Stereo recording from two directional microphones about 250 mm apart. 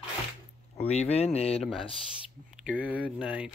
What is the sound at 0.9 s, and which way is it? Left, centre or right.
Speech, left.